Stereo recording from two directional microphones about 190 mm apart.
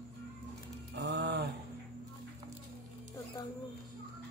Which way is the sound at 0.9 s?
65° right (ahead or behind).